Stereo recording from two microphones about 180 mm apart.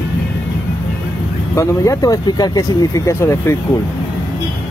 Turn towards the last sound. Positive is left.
turn(degrees=15)  # may be behind; listen again after turning